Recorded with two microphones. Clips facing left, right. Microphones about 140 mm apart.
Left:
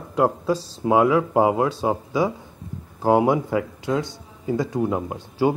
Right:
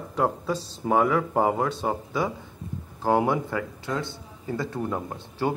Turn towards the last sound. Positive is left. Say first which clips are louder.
# left 6 dB
turn(degrees=15)  # may be behind; listen again after turning